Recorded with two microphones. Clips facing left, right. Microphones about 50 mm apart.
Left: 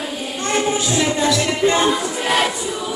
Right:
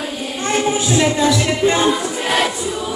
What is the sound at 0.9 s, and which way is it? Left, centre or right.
Music, centre.